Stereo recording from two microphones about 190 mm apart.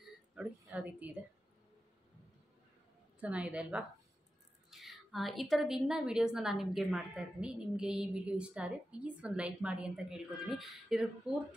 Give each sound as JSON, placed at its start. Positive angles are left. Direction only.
{"t": 0.4, "sound": "a woman's voice", "side_deg": -5}
{"t": 3.2, "sound": "a woman's voice", "side_deg": -5}